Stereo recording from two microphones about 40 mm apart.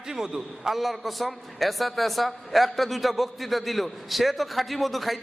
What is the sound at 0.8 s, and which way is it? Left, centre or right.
A man's voice, centre.